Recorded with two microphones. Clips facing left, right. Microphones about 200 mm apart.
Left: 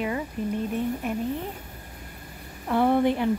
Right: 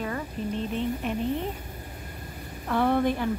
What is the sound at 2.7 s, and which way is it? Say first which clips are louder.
Speech: left 2 dB; 15° left (ahead or behind).